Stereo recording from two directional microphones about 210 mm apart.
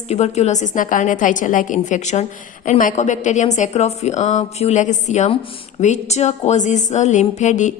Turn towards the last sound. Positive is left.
turn(degrees=35)  # may be behind; listen again after turning